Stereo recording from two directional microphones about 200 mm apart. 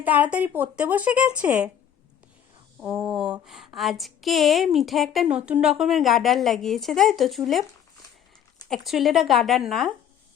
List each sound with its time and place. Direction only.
0.0 s speech: 10° right (ahead or behind)
2.8 s a woman's voice: 5° right (ahead or behind)
8.7 s a woman's voice: centre (ahead or behind)